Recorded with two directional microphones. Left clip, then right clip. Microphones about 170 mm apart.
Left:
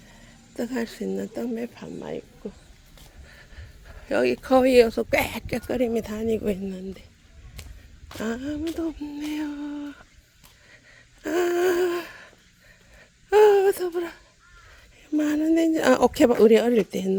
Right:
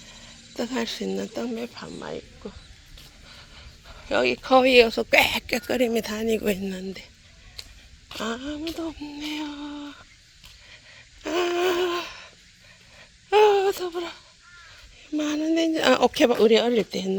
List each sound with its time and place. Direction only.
0.2 s speech: 15° left (ahead or behind)
1.5 s speech: 25° left (ahead or behind)
3.8 s speech: 35° left (ahead or behind); by 7.1 s centre (ahead or behind)
8.2 s speech: 35° left (ahead or behind)
11.2 s a sound: 30° left (ahead or behind)
15.1 s speech: 35° left (ahead or behind)